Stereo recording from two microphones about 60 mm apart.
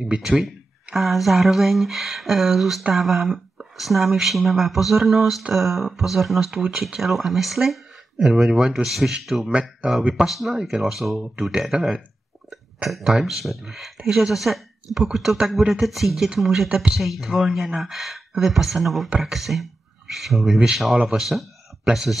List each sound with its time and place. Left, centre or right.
0.0 s speech: centre
6.8 s speech: centre
9.5 s speech: right
10.1 s speech: centre
16.6 s speech: centre
16.9 s speech: centre
20.9 s speech: centre
21.2 s speech: centre